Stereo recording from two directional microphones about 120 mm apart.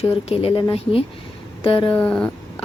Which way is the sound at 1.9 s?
10° left (ahead or behind).